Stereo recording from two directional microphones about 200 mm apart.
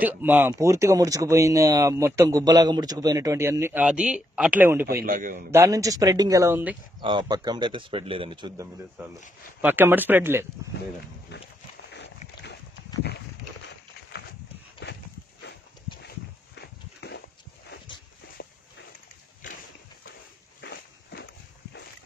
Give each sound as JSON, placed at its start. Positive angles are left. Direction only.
{"t": 0.0, "sound": "speech", "side_deg": -10}
{"t": 5.0, "sound": "a man's voice", "side_deg": -45}
{"t": 5.5, "sound": "speech", "side_deg": -15}
{"t": 7.0, "sound": "speech", "side_deg": -20}
{"t": 9.6, "sound": "speech", "side_deg": -10}
{"t": 11.3, "sound": "a sound", "side_deg": 60}
{"t": 14.9, "sound": "a sound", "side_deg": 55}
{"t": 16.5, "sound": "horse", "side_deg": 55}
{"t": 20.6, "sound": "walk", "side_deg": 55}